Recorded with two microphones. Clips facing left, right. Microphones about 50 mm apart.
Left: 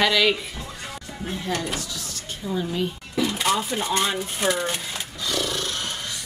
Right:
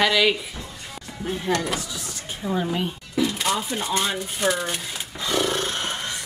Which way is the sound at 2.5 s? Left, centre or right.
Right.